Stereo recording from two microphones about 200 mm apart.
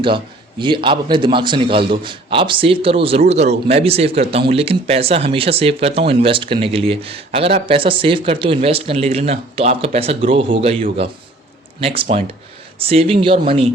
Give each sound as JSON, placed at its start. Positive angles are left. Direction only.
{"t": 0.6, "sound": "speech", "side_deg": -25}